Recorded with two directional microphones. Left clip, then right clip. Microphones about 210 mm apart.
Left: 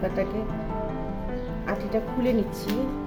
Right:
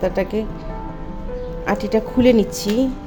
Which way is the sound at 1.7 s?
45° right (ahead or behind).